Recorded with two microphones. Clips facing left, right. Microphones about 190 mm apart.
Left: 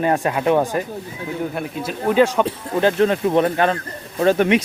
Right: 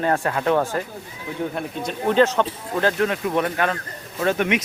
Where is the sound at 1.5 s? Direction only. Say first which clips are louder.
Left 2 dB; 5° left (ahead or behind).